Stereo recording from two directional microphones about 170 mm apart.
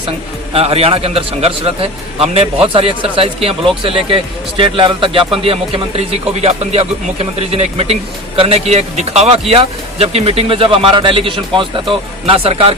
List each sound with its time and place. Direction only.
0.5 s a man's voice: 35° right (ahead or behind)